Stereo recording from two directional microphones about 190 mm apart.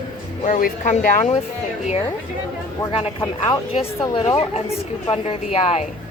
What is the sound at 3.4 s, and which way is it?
Speech, 30° left (ahead or behind).